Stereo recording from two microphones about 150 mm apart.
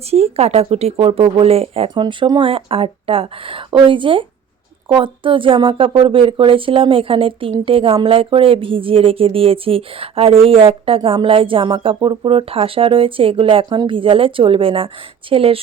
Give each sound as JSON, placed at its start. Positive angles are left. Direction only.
{"t": 0.1, "sound": "speech", "side_deg": -45}